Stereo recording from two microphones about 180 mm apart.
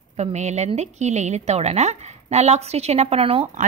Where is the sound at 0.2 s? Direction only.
40° right (ahead or behind).